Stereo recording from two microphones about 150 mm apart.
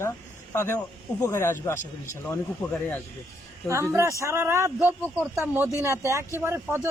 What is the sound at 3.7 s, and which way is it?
Speech, 20° right (ahead or behind).